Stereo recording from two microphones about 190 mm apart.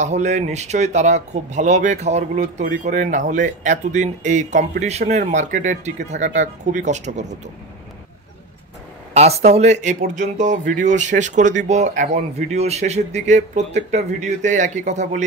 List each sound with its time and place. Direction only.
0.0 s speech: 40° right (ahead or behind)
9.1 s speech: 35° right (ahead or behind)